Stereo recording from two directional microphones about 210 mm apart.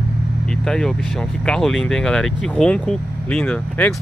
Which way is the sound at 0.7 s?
5° left (ahead or behind).